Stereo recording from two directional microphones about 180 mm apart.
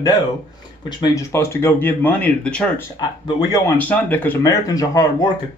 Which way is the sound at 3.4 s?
15° left (ahead or behind).